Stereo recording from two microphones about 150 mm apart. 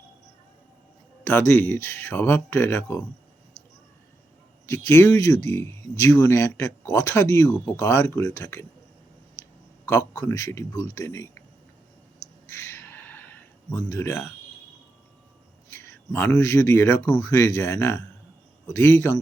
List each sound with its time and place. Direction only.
1.2 s speech: 15° left (ahead or behind)
4.6 s speech: 15° left (ahead or behind)
9.9 s speech: 20° left (ahead or behind)
12.5 s a sound: 15° left (ahead or behind)
13.9 s speech: 20° left (ahead or behind)
15.7 s speech: 15° left (ahead or behind)